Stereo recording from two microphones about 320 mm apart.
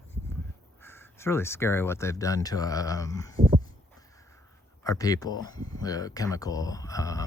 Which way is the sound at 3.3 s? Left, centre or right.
Centre.